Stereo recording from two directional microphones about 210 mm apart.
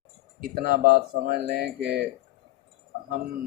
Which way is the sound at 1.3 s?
45° right (ahead or behind).